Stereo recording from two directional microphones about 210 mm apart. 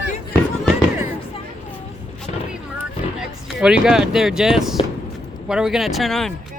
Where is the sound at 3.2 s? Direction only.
5° right (ahead or behind).